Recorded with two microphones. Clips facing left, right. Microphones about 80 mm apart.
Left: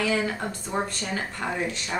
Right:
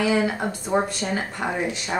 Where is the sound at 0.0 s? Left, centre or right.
Centre.